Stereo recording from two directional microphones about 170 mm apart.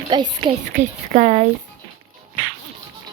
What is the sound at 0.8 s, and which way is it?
Speech, 40° right (ahead or behind).